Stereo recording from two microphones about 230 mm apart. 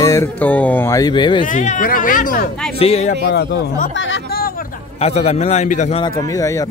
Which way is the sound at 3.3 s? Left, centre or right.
Left.